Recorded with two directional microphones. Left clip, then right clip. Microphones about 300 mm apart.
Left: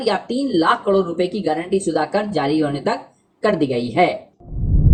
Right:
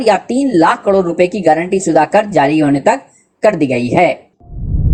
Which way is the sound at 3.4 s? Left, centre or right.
Centre.